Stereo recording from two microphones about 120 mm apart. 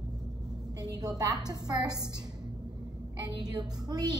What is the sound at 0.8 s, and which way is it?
A woman's voice, 35° right (ahead or behind).